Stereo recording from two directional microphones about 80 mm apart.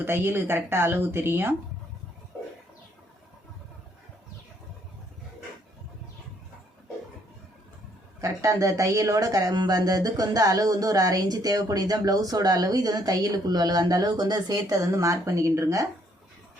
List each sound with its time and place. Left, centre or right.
0.0 s speech: right
8.2 s speech: right